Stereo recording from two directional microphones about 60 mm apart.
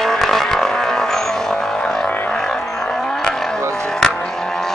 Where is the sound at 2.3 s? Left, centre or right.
Centre.